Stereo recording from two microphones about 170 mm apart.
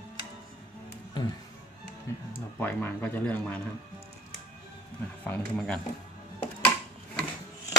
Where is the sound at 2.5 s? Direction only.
10° left (ahead or behind).